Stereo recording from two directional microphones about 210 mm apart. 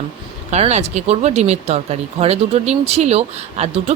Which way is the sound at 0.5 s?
30° right (ahead or behind).